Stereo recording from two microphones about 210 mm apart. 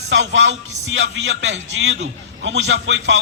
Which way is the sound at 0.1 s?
65° right (ahead or behind).